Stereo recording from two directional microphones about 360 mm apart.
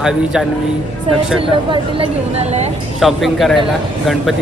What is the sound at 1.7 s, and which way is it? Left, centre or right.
Speech, centre.